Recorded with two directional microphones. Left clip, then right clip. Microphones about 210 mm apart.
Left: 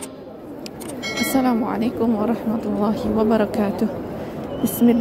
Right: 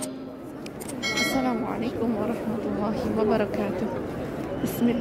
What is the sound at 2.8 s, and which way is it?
A woman's voice, 15° left (ahead or behind).